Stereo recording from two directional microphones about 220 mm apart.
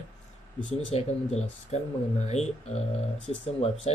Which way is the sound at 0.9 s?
30° left (ahead or behind).